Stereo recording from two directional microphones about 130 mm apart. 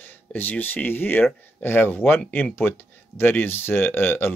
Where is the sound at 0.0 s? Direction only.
15° left (ahead or behind).